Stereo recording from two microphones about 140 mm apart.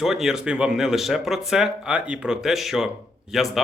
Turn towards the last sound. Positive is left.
turn(degrees=0)  # may be behind; listen again after turning